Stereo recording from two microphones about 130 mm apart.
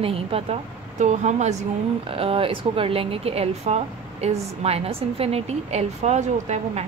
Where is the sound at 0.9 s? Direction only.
65° right (ahead or behind).